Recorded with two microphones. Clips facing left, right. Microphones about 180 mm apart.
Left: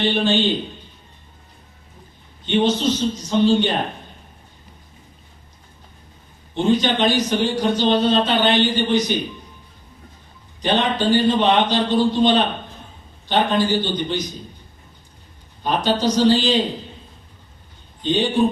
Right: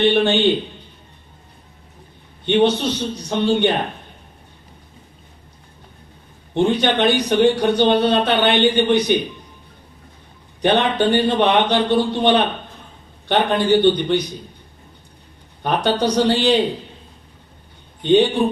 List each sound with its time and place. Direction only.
0.0 s a man's voice: 60° right (ahead or behind)
2.4 s a man's voice: 60° right (ahead or behind)
6.5 s a man's voice: 60° right (ahead or behind)
10.6 s a man's voice: 60° right (ahead or behind)
15.6 s a man's voice: 60° right (ahead or behind)
18.0 s a man's voice: 60° right (ahead or behind)